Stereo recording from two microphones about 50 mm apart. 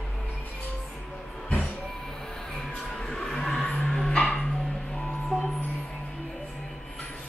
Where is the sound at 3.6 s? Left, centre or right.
Left.